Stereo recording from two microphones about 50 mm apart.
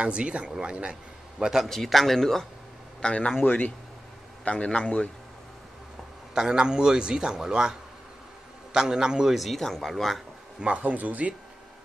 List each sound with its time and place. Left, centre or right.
0.0 s speech: right
1.6 s a man's voice: centre
3.4 s speech: left
4.5 s a man's voice: centre
6.3 s a man's voice: centre
8.7 s a man's voice: centre
9.4 s speech: centre
10.6 s speech: right